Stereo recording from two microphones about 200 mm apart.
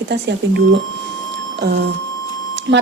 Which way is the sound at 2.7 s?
60° right (ahead or behind).